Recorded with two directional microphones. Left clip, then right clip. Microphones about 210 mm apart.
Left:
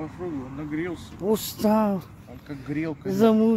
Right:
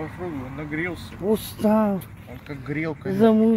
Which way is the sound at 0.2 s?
15° right (ahead or behind).